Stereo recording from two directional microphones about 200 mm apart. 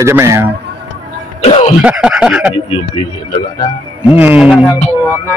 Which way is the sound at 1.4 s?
30° left (ahead or behind).